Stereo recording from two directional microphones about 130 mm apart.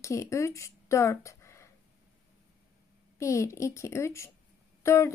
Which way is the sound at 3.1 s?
25° left (ahead or behind).